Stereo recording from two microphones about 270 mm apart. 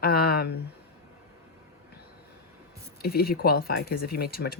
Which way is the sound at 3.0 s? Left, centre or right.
Left.